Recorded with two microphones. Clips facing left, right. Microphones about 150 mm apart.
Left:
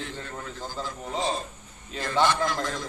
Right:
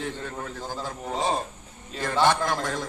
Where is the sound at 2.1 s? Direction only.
65° right (ahead or behind).